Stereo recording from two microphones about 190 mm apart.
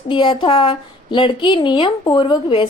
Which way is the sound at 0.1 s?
25° left (ahead or behind).